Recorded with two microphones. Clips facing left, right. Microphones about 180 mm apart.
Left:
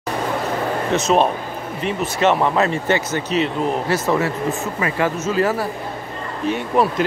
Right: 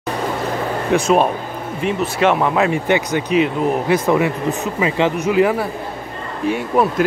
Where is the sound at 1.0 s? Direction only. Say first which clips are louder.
Right 1 dB; 5° right (ahead or behind).